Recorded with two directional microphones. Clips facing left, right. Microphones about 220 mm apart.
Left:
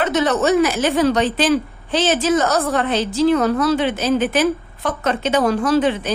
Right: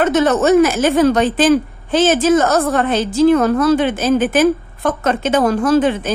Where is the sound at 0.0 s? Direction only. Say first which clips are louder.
Right 4 dB; 45° right (ahead or behind).